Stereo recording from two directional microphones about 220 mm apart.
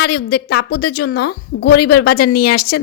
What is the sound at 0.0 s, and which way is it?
A woman's voice, 45° left (ahead or behind).